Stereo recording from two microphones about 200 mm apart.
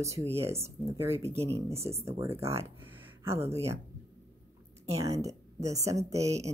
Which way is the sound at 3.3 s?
30° right (ahead or behind).